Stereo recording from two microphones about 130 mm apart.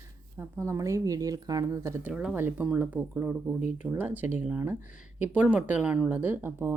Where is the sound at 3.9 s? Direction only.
15° right (ahead or behind).